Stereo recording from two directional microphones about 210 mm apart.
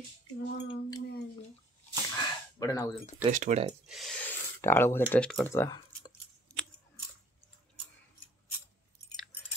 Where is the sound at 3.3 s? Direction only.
35° right (ahead or behind).